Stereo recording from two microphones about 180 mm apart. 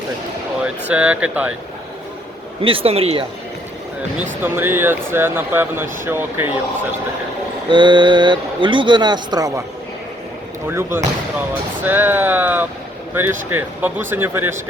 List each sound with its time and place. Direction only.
0.6 s speech: 5° right (ahead or behind)
2.6 s speech: 30° right (ahead or behind)
4.2 s speech: 10° right (ahead or behind)
7.7 s speech: 25° right (ahead or behind)
10.7 s speech: 15° right (ahead or behind)